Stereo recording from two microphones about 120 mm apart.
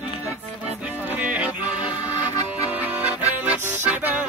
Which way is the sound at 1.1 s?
10° right (ahead or behind).